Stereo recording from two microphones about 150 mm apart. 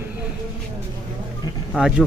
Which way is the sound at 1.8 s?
10° right (ahead or behind).